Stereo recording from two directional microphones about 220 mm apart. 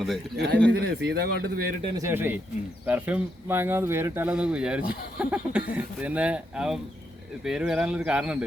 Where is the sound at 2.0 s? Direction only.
10° right (ahead or behind).